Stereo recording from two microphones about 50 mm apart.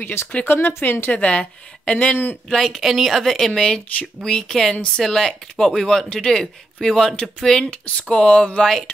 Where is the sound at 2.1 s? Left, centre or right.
Left.